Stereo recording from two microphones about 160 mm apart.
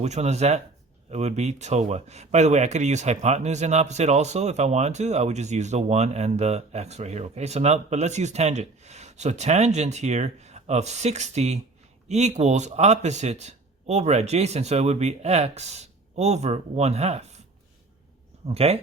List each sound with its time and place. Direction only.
0.0 s speech: 45° right (ahead or behind)
18.4 s speech: 40° right (ahead or behind)